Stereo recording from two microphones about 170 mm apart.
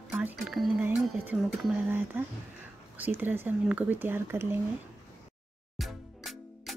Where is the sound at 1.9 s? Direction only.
10° right (ahead or behind).